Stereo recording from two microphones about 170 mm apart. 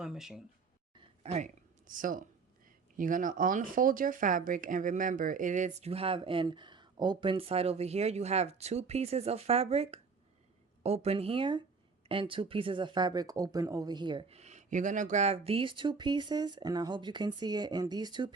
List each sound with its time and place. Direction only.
0.0 s speech: 5° right (ahead or behind)
0.9 s a sound: 40° right (ahead or behind)
1.9 s speech: 50° right (ahead or behind); by 18.3 s 25° right (ahead or behind)